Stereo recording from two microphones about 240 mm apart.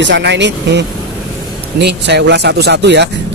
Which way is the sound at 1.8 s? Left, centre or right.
Right.